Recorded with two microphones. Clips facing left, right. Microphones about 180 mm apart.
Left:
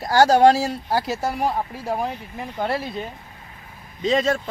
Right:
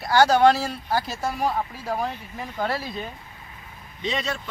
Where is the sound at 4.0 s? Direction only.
40° left (ahead or behind).